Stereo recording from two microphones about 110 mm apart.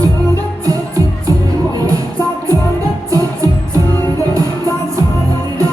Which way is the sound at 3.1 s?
30° right (ahead or behind).